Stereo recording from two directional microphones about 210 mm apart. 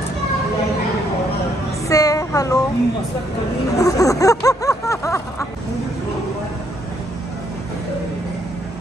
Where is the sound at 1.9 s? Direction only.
15° left (ahead or behind).